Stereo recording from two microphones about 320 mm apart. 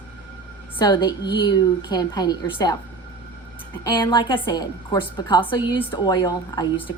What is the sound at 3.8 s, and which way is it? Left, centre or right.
A woman's voice, centre.